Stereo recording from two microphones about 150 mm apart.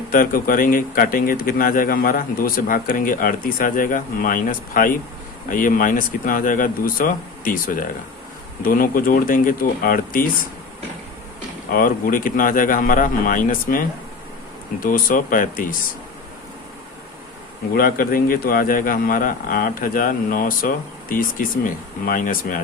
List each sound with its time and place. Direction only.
0.1 s speech: 70° left (ahead or behind)
11.7 s speech: 70° left (ahead or behind)
17.7 s speech: 75° left (ahead or behind)